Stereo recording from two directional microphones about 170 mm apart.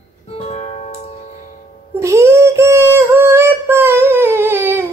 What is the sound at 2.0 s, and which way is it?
Synthetic singing, 15° right (ahead or behind).